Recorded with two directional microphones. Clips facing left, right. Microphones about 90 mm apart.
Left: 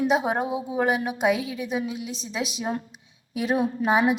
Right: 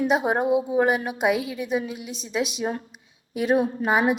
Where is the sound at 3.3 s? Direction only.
45° right (ahead or behind).